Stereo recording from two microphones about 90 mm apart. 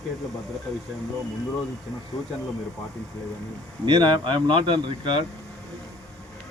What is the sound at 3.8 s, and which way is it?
Speech, 60° right (ahead or behind).